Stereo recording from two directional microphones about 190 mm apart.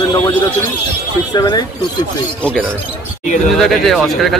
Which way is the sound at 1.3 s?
20° left (ahead or behind).